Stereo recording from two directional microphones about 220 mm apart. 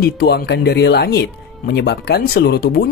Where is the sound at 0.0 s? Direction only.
45° left (ahead or behind).